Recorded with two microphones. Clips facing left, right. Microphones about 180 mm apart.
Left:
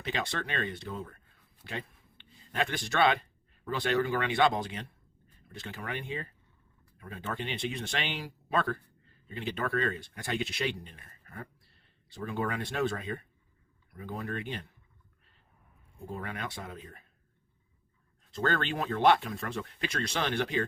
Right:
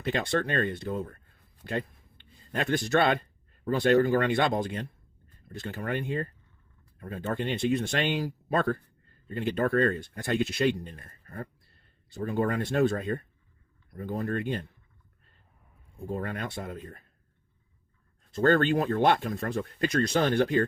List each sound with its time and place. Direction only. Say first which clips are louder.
0.0 s speech: right 7 dB; 50° right (ahead or behind)
2.6 s speech: right 3 dB; 50° right (ahead or behind)
16.1 s speech: right 5 dB; 50° right (ahead or behind)
18.4 s speech: right 8 dB; 50° right (ahead or behind)